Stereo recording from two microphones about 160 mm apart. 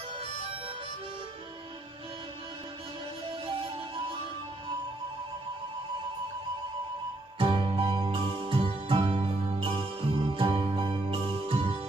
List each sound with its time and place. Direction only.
3.4 s music: 30° right (ahead or behind)
7.3 s music: 30° right (ahead or behind)